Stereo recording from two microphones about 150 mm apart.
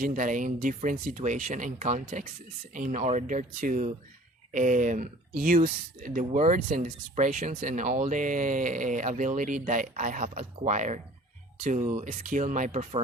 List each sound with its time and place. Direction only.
0.0 s speech: 60° right (ahead or behind)